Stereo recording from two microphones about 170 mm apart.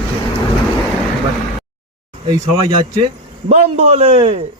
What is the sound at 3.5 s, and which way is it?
Speech, 40° right (ahead or behind).